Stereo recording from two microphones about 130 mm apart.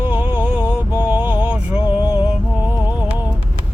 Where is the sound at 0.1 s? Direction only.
15° right (ahead or behind).